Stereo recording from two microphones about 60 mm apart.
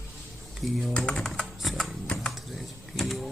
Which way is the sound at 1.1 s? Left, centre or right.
Centre.